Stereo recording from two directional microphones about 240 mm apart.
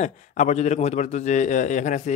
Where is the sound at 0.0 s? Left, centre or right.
Left.